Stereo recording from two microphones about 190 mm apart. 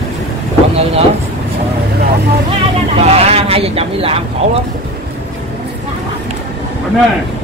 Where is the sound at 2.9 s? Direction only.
35° right (ahead or behind).